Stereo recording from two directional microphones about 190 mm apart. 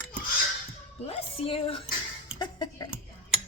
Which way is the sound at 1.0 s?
30° left (ahead or behind).